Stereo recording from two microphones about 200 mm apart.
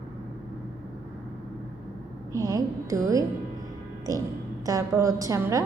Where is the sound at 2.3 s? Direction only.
15° right (ahead or behind).